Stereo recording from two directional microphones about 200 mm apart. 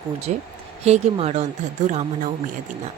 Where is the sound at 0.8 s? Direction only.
35° right (ahead or behind).